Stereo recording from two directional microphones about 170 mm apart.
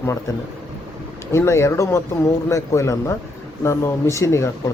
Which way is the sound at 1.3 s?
15° left (ahead or behind).